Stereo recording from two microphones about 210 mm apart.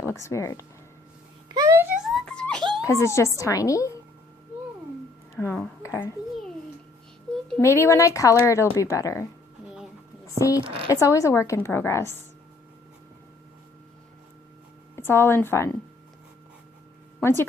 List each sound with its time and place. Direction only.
0.0 s speech: 10° left (ahead or behind)
1.5 s wail: 15° right (ahead or behind); by 2.6 s 5° left (ahead or behind)
2.8 s a woman's voice: 15° left (ahead or behind)
5.3 s a woman's voice: 10° left (ahead or behind)
7.6 s a woman's voice: 15° left (ahead or behind)
10.6 s a woman's voice: 25° right (ahead or behind)
10.8 s a woman's voice: 15° left (ahead or behind)
14.9 s a woman's voice: 10° left (ahead or behind)
17.2 s speech: 10° left (ahead or behind)